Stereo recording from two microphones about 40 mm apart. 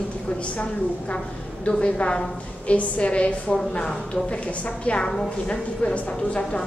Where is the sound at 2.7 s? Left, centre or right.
Left.